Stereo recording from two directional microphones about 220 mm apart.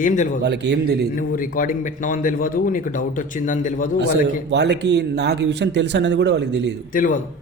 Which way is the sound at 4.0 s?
50° right (ahead or behind).